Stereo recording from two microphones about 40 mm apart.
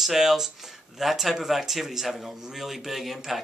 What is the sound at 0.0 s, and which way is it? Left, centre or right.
Speech, centre.